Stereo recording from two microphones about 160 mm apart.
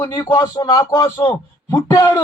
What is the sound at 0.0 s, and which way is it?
A man's voice, 30° left (ahead or behind).